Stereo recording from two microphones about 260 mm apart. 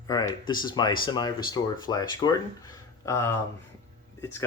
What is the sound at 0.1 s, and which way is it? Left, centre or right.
Speech, centre.